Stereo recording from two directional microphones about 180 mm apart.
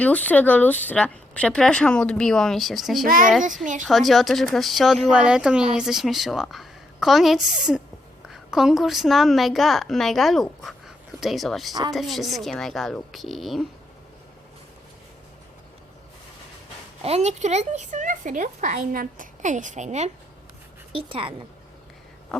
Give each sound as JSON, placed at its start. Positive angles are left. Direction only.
{"t": 0.0, "sound": "speech", "side_deg": 10}
{"t": 3.4, "sound": "speech", "side_deg": -45}
{"t": 3.8, "sound": "a woman's voice", "side_deg": 0}
{"t": 11.7, "sound": "a woman's voice", "side_deg": -20}
{"t": 11.9, "sound": "speech", "side_deg": 0}
{"t": 17.0, "sound": "speech", "side_deg": -35}
{"t": 20.9, "sound": "a woman's voice", "side_deg": -30}
{"t": 22.3, "sound": "a sound", "side_deg": 0}